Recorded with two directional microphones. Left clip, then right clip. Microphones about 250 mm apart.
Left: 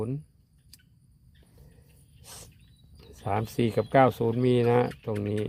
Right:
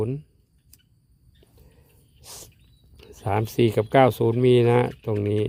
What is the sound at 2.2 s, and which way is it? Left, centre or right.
Cricket, right.